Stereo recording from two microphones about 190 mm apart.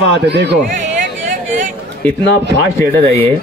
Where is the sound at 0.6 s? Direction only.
40° right (ahead or behind).